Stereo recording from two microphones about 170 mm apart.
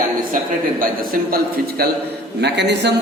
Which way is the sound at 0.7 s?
60° right (ahead or behind).